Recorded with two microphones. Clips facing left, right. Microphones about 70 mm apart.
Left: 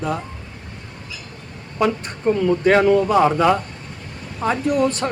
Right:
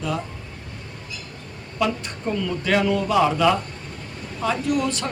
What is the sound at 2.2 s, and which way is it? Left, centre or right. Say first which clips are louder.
Speech: left 9 dB; left.